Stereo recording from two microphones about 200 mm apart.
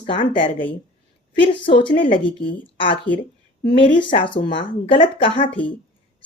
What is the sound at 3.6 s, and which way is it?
Speech, 45° left (ahead or behind).